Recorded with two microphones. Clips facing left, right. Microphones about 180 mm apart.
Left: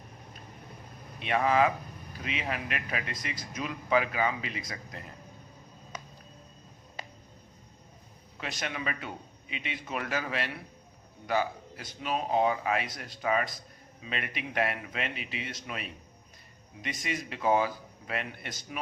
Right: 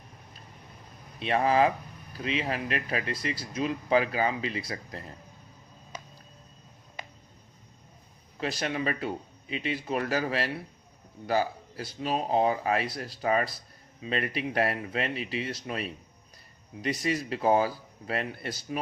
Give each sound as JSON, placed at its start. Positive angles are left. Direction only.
{"t": 1.2, "sound": "speech", "side_deg": -35}
{"t": 8.4, "sound": "speech", "side_deg": -35}